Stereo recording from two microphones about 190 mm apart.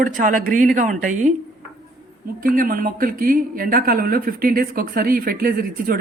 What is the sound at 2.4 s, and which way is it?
Speech, 50° right (ahead or behind).